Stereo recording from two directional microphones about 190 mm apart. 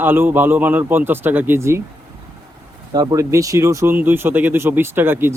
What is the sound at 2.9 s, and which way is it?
Speech, 20° right (ahead or behind).